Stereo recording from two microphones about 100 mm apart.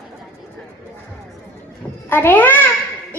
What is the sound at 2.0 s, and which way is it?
Child singing, 20° left (ahead or behind).